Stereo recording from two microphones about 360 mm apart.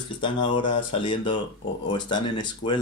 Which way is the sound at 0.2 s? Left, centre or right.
Centre.